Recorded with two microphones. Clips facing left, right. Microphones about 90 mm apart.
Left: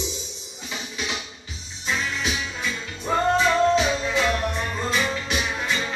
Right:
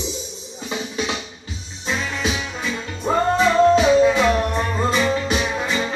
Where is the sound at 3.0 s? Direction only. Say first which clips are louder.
Right 3 dB; 40° right (ahead or behind).